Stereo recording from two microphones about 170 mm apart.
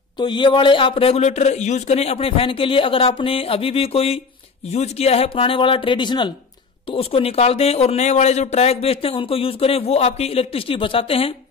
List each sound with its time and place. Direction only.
0.2 s speech: 25° left (ahead or behind)